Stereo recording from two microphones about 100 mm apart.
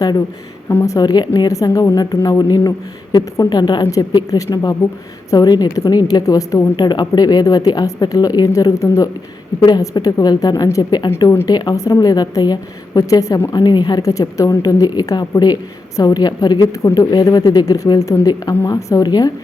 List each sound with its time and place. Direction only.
0.7 s speech: 20° left (ahead or behind)
0.9 s a woman's voice: 40° left (ahead or behind)